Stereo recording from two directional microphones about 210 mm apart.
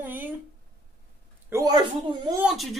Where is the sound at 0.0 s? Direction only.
10° right (ahead or behind).